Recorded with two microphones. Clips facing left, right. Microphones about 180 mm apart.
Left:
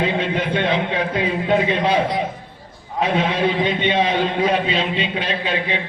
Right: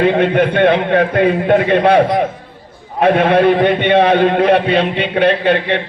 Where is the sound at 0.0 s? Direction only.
60° right (ahead or behind).